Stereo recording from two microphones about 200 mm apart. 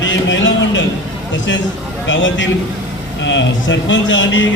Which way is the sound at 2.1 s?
70° left (ahead or behind).